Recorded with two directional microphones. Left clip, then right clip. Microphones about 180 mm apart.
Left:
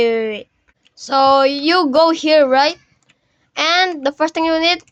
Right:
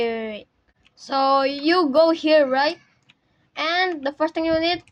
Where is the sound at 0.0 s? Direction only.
30° left (ahead or behind).